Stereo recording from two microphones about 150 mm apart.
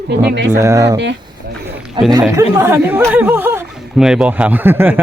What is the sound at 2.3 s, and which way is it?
A man's voice, 20° right (ahead or behind).